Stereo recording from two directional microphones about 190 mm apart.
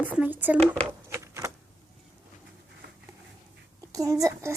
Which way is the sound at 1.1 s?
15° right (ahead or behind).